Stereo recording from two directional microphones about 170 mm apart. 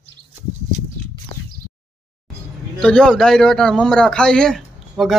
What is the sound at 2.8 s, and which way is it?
A man's voice, 5° left (ahead or behind).